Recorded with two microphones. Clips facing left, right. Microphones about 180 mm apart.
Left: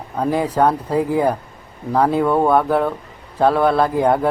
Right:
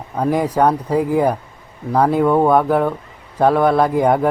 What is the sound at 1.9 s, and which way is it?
Speech, 10° right (ahead or behind).